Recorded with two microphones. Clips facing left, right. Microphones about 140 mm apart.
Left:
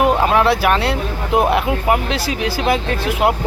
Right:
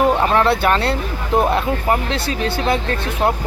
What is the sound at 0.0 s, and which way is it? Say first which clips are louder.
Speech: left 1 dB; 5° left (ahead or behind).